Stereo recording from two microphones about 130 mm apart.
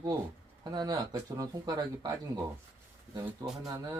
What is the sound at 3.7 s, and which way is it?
Speech, 25° right (ahead or behind).